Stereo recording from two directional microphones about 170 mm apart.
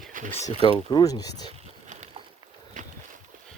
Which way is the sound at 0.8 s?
25° left (ahead or behind).